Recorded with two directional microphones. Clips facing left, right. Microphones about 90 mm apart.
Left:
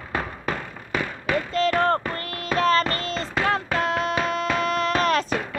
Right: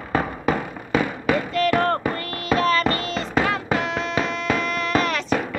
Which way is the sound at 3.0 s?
35° left (ahead or behind).